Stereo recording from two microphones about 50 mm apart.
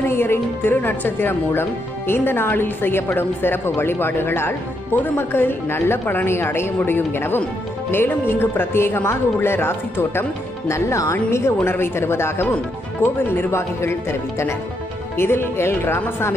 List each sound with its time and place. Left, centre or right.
0.0 s speech: left
6.8 s speech: left
10.7 s speech: left
11.2 s speech: left
11.6 s speech: left
15.1 s speech: left